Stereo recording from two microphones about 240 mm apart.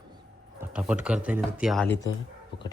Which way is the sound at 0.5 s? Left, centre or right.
Centre.